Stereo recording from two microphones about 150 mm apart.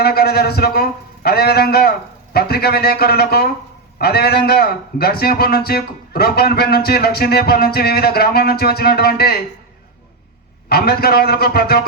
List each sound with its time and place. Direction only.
0.0 s a man's voice: 90° left
10.7 s a man's voice: 90° left